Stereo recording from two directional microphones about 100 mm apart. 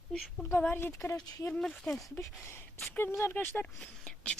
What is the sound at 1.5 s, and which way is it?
Speech, 5° left (ahead or behind).